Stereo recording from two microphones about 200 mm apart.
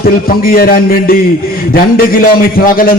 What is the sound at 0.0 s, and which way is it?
A man's voice, 50° left (ahead or behind).